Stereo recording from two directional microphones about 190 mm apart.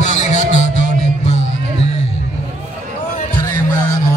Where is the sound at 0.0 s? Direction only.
40° left (ahead or behind).